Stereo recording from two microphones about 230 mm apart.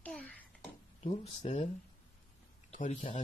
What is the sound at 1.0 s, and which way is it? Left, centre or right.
Speech, left.